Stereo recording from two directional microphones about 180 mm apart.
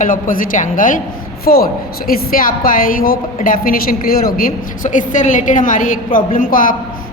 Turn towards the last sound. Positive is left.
turn(degrees=50)  # may be behind; listen again after turning